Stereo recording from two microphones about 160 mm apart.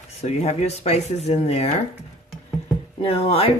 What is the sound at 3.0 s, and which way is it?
Speech, 35° left (ahead or behind).